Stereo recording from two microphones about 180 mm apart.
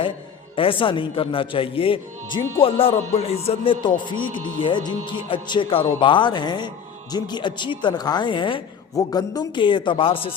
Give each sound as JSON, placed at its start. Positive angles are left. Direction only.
{"t": 0.5, "sound": "a man's voice", "side_deg": 30}